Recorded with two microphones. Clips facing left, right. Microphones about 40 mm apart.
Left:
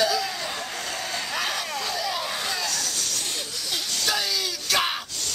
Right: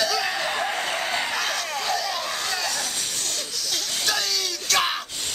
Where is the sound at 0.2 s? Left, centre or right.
Right.